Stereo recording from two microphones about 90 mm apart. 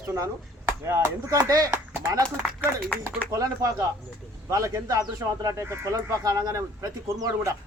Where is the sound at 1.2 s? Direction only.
40° right (ahead or behind).